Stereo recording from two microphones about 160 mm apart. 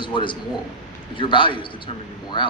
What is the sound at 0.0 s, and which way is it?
A man's voice, 30° left (ahead or behind).